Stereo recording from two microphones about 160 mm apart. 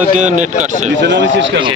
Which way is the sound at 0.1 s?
50° right (ahead or behind).